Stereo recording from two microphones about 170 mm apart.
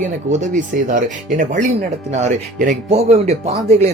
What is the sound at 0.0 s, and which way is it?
Speech, 45° right (ahead or behind).